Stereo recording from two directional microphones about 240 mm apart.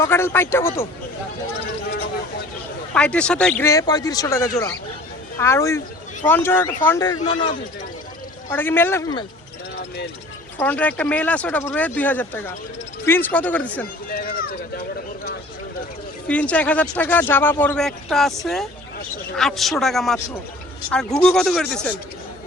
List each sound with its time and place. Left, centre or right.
0.0 s speech: centre
2.9 s speech: centre
8.4 s speech: centre
10.6 s speech: centre
14.1 s speech: left
16.2 s speech: centre